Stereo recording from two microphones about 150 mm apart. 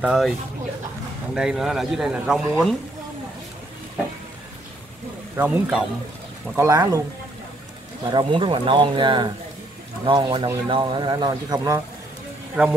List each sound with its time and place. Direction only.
0.0 s a man's voice: 5° right (ahead or behind)
1.3 s a man's voice: 5° right (ahead or behind)
5.3 s speech: 10° right (ahead or behind)
6.5 s speech: 20° right (ahead or behind)
8.1 s speech: 35° right (ahead or behind)
12.6 s a man's voice: centre (ahead or behind)